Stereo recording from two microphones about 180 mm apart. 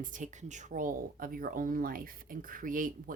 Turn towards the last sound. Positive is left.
turn(degrees=-50)  # may be behind; listen again after turning